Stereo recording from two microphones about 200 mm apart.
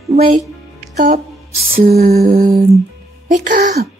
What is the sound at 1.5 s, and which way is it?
Lullaby, 35° right (ahead or behind).